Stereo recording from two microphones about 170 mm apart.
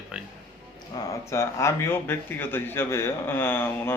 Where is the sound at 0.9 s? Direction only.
15° left (ahead or behind).